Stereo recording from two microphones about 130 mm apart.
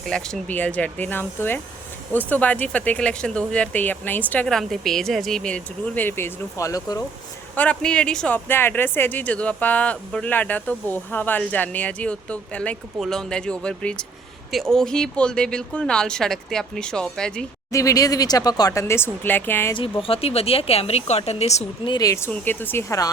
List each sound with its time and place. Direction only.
0.0 s speech: 5° left (ahead or behind)
4.4 s speech: centre (ahead or behind); by 7.0 s 25° left (ahead or behind)
7.5 s speech: 10° left (ahead or behind)
8.4 s speech: 15° left (ahead or behind)
17.7 s speech: 25° left (ahead or behind)
19.7 s speech: 45° left (ahead or behind)
21.8 s speech: 30° left (ahead or behind)
22.3 s speech: 15° left (ahead or behind)